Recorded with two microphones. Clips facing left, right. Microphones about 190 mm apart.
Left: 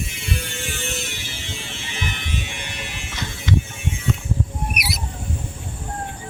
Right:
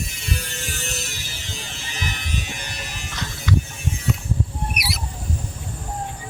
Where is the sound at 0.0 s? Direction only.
40° right (ahead or behind).